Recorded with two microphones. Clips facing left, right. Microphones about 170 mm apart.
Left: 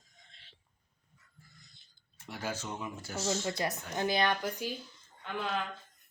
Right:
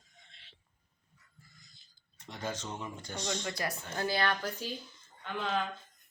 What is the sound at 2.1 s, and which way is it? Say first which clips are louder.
A woman's voice: even; 5° left (ahead or behind).